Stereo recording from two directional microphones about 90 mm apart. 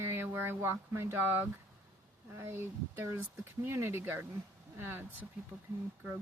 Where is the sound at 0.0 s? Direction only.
25° right (ahead or behind).